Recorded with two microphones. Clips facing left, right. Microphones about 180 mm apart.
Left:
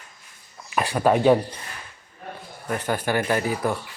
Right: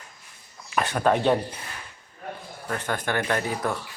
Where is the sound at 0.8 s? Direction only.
5° left (ahead or behind).